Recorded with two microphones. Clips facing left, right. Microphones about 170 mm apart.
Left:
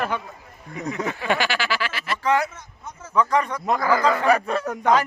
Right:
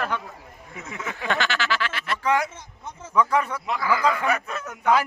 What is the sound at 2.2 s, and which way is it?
A man's voice, 10° right (ahead or behind).